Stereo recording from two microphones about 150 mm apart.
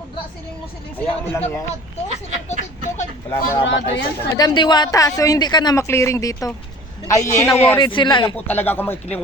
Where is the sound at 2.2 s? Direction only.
55° right (ahead or behind).